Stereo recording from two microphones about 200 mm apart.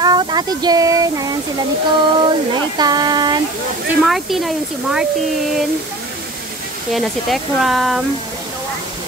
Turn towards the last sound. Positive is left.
turn(degrees=0)  # may be behind; listen again after turning